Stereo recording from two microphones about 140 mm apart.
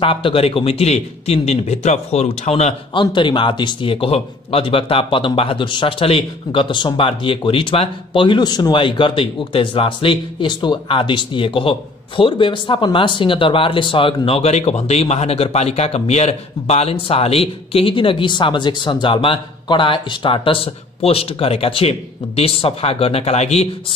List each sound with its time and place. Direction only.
0.0 s speech: 40° left (ahead or behind)
2.9 s speech: 35° left (ahead or behind)